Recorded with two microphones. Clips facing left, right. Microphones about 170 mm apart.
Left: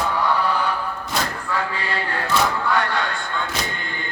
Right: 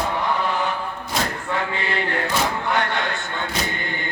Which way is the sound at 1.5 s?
25° right (ahead or behind).